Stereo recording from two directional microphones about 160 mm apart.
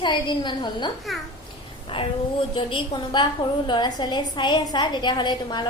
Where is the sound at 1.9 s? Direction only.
35° left (ahead or behind).